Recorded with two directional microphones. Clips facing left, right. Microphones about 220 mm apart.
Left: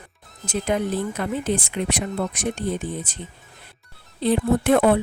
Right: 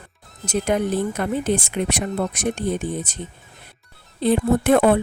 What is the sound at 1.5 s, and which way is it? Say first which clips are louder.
Speech: right 2 dB; 60° right (ahead or behind).